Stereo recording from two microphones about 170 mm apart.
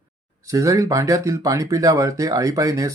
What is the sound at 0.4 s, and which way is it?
Speech, 20° right (ahead or behind).